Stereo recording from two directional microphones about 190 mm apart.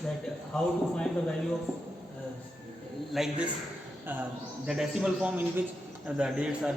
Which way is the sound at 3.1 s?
Centre (ahead or behind).